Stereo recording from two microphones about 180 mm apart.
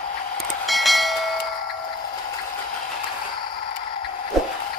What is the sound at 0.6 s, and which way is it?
Train, centre (ahead or behind).